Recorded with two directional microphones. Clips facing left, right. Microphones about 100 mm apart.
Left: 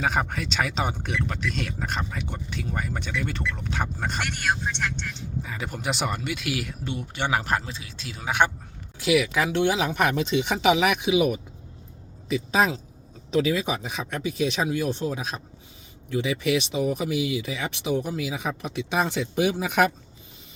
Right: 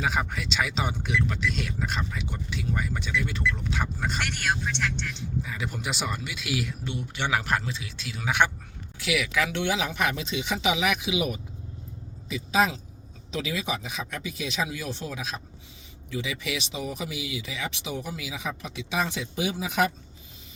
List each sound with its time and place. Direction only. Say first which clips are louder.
0.0 s speech: left 2 dB; 45° left (ahead or behind)
5.4 s speech: left 1 dB; 40° left (ahead or behind); by 19.9 s 55° left (ahead or behind)